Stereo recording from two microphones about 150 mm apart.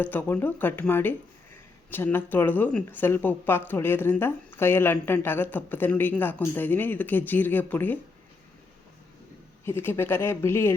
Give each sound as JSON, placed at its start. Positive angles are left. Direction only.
{"t": 0.0, "sound": "a woman's voice", "side_deg": 10}
{"t": 9.6, "sound": "a woman's voice", "side_deg": 15}